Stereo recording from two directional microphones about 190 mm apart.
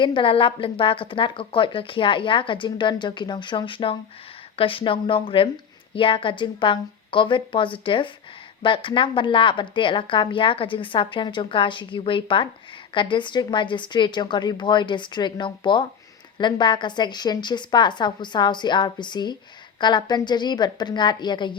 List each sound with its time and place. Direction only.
0.0 s a woman's voice: 25° left (ahead or behind)